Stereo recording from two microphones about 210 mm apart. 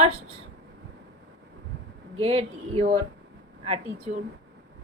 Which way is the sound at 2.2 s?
25° right (ahead or behind).